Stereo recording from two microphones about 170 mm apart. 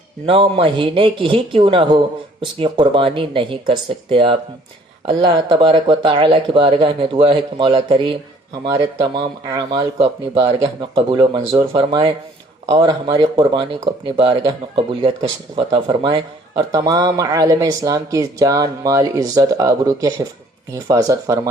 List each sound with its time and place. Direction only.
0.3 s speech: 30° right (ahead or behind)
9.5 s speech: 25° right (ahead or behind)